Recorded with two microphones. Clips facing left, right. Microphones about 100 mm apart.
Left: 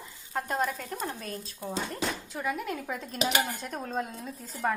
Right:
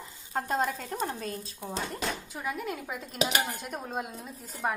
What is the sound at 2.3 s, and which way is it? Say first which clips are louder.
A woman's voice: left 2 dB; 5° right (ahead or behind).